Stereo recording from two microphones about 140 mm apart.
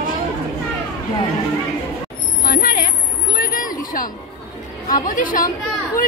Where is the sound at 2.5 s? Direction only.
90° left.